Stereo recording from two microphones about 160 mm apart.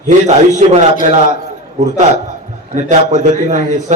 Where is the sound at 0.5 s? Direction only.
45° right (ahead or behind).